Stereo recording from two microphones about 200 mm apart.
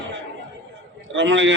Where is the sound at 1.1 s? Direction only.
65° right (ahead or behind).